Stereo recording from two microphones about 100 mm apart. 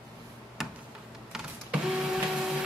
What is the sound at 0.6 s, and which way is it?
Tick-tock, centre (ahead or behind).